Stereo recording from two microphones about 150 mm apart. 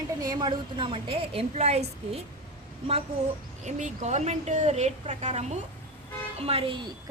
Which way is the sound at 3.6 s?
50° right (ahead or behind).